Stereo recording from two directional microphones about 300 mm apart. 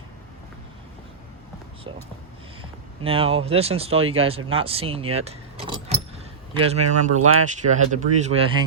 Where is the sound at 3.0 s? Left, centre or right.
Centre.